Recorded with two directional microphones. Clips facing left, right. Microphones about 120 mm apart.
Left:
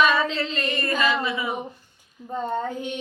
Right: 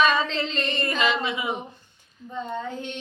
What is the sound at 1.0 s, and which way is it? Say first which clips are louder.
Child singing: even; 20° right (ahead or behind).